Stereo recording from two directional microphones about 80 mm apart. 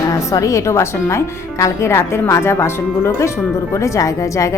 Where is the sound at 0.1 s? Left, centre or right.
Left.